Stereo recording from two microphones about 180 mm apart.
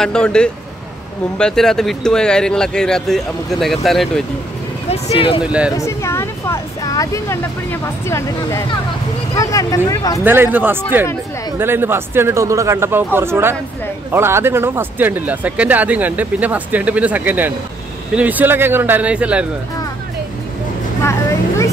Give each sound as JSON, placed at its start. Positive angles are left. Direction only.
{"t": 0.0, "sound": "speech", "side_deg": 5}
{"t": 4.9, "sound": "speech", "side_deg": 30}
{"t": 5.4, "sound": "speech", "side_deg": -5}
{"t": 5.7, "sound": "speech", "side_deg": 15}
{"t": 10.2, "sound": "speech", "side_deg": -10}
{"t": 21.0, "sound": "vehicle", "side_deg": 15}